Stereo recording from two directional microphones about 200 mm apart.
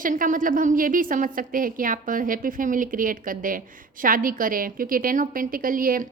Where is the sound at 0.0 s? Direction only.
40° right (ahead or behind).